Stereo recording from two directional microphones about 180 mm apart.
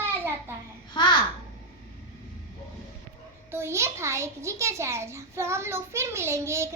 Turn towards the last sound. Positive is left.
turn(degrees=-15)  # may be behind; listen again after turning